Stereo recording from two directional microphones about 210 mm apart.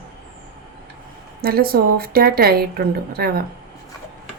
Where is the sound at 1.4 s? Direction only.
45° right (ahead or behind).